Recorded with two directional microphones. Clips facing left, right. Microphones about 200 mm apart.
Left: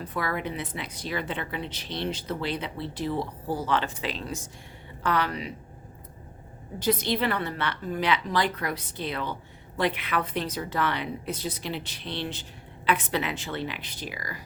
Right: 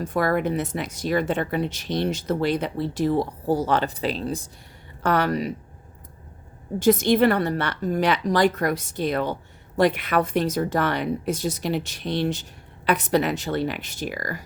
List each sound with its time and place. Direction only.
0.0 s a woman's voice: 45° right (ahead or behind)
5.0 s a woman's voice: 45° right (ahead or behind)
6.8 s a woman's voice: 45° right (ahead or behind)